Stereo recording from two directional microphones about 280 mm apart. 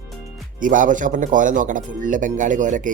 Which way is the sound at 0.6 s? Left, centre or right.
Right.